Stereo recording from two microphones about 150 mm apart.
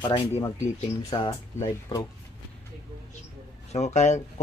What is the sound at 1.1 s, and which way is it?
Speech, 30° left (ahead or behind).